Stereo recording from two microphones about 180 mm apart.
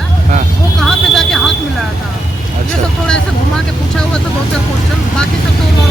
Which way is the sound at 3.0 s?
5° left (ahead or behind).